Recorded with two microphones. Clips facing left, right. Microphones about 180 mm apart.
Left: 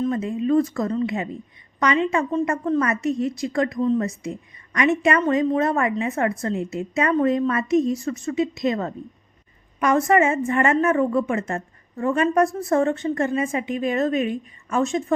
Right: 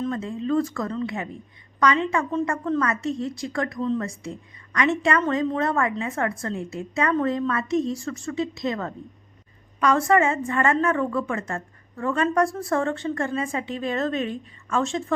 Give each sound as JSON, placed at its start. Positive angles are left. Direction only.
{"t": 0.1, "sound": "a woman's voice", "side_deg": 20}